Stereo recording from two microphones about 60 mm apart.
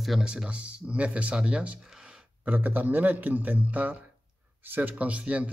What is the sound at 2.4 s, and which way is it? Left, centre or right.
A man's voice, right.